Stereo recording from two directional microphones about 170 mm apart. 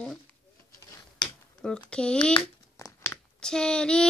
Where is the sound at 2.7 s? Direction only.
15° left (ahead or behind).